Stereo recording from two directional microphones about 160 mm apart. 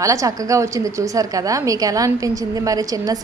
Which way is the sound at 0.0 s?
20° right (ahead or behind).